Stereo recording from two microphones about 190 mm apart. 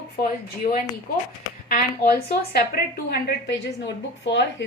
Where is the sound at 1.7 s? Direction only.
50° left (ahead or behind).